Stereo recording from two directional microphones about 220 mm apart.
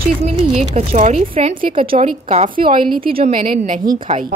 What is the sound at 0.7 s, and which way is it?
Speech, 30° right (ahead or behind).